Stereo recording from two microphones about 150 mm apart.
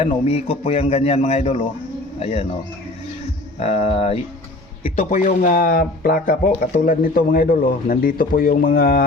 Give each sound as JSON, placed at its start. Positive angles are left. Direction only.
{"t": 0.0, "sound": "a man's voice", "side_deg": 40}
{"t": 3.6, "sound": "a man's voice", "side_deg": 45}
{"t": 4.9, "sound": "speech", "side_deg": 55}